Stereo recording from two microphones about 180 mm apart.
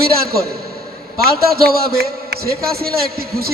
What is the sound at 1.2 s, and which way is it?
A man's voice, 55° right (ahead or behind).